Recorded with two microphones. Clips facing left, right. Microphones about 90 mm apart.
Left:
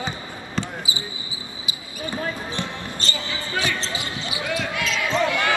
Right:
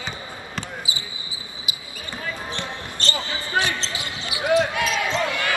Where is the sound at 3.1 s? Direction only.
40° right (ahead or behind).